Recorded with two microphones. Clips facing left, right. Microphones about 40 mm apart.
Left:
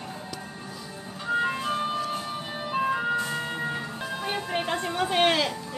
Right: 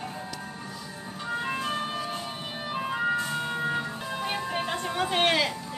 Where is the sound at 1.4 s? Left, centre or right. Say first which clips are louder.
Left 2 dB; centre.